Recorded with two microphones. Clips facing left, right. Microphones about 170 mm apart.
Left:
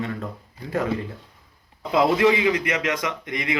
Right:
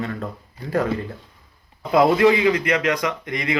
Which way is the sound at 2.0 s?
20° left (ahead or behind).